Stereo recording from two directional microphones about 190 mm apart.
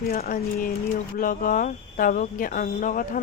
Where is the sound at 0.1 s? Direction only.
45° left (ahead or behind).